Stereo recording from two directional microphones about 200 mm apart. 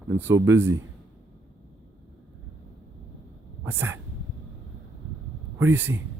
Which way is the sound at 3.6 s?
10° right (ahead or behind).